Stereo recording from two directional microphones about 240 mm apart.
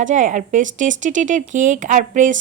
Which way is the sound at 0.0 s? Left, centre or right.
Right.